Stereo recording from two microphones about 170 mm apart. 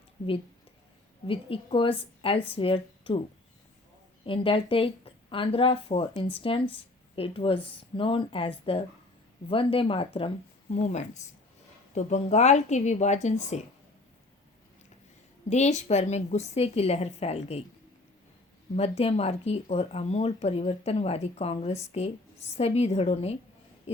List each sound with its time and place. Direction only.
1.3 s speech: 30° left (ahead or behind)
4.3 s a woman's voice: 30° left (ahead or behind)
15.4 s speech: 40° left (ahead or behind)
18.8 s speech: 40° left (ahead or behind)